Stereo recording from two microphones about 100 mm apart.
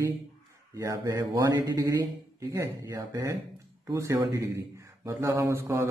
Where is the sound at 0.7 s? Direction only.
35° right (ahead or behind).